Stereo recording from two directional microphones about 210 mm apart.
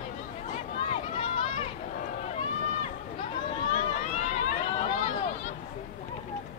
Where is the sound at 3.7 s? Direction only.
30° left (ahead or behind).